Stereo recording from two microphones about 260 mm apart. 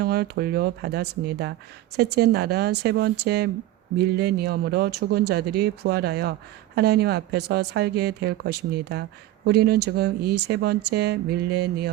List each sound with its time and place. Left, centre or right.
0.0 s speech: right